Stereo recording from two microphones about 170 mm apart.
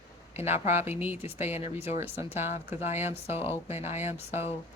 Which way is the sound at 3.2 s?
35° left (ahead or behind).